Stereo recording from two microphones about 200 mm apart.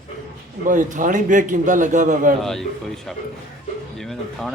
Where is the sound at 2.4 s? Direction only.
Centre (ahead or behind).